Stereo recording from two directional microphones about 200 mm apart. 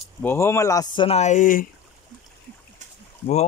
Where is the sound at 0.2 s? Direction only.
10° left (ahead or behind); by 1.7 s 40° left (ahead or behind).